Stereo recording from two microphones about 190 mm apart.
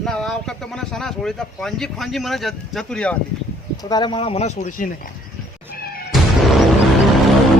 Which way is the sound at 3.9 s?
25° left (ahead or behind).